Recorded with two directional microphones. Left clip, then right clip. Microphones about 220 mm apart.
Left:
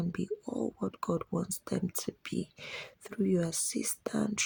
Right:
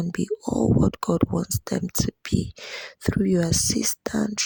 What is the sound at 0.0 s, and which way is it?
Speech, 35° right (ahead or behind).